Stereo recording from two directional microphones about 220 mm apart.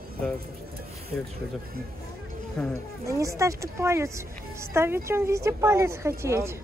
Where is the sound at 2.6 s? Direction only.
5° left (ahead or behind).